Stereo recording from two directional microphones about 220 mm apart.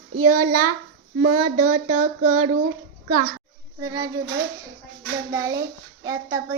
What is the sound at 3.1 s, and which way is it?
Speech, 35° right (ahead or behind).